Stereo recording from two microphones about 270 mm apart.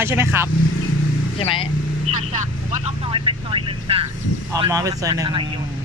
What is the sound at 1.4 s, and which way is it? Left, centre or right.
Speech, centre.